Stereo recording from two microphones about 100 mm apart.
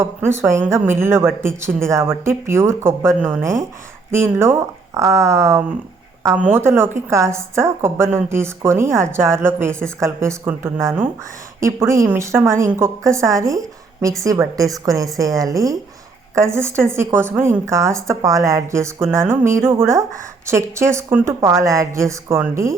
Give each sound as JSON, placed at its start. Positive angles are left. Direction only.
{"t": 0.0, "sound": "a woman's voice", "side_deg": -25}
{"t": 6.3, "sound": "a woman's voice", "side_deg": -20}